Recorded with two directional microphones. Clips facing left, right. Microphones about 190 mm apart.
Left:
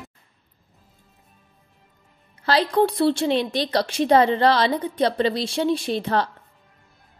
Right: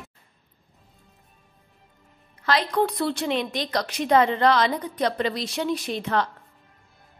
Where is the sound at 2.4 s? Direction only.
30° left (ahead or behind).